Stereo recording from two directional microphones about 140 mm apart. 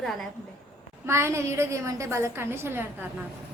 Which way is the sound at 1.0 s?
20° right (ahead or behind).